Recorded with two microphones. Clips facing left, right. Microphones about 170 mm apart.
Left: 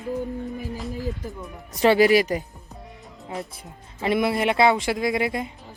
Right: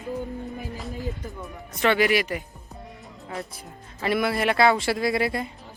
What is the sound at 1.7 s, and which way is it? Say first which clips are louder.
Speech: left 5 dB; 35° left (ahead or behind).